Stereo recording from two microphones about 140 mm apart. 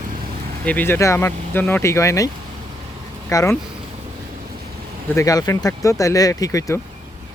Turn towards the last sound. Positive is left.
turn(degrees=25)  # may be behind; listen again after turning